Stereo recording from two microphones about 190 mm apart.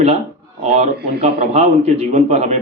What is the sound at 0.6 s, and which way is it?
A man's voice, 35° right (ahead or behind).